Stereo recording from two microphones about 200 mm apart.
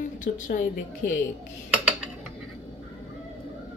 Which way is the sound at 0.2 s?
45° left (ahead or behind).